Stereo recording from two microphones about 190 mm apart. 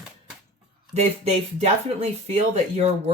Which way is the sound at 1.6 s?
35° right (ahead or behind).